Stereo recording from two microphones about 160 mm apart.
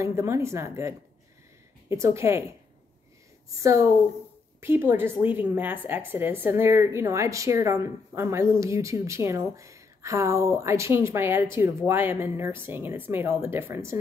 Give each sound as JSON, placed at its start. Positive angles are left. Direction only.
{"t": 0.0, "sound": "speech", "side_deg": -15}
{"t": 3.4, "sound": "a woman's voice", "side_deg": -20}